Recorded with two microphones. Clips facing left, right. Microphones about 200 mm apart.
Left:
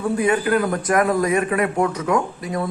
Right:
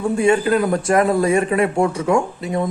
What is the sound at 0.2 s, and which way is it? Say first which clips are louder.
A man's voice: right 4 dB; 25° right (ahead or behind).